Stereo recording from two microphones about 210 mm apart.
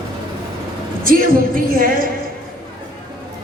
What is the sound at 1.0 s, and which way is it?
Speech, 40° right (ahead or behind).